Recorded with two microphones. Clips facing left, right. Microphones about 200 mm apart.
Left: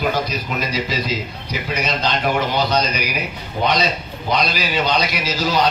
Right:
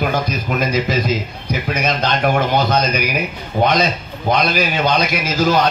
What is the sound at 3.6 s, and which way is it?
A man's voice, 50° right (ahead or behind).